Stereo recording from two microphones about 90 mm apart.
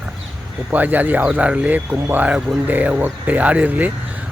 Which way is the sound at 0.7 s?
20° right (ahead or behind).